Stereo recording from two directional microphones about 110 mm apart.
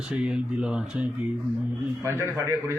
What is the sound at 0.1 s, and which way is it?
Speech, 10° right (ahead or behind).